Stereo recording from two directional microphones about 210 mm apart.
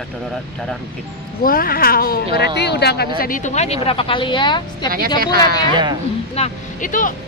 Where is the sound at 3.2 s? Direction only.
40° left (ahead or behind); by 4.6 s 20° left (ahead or behind).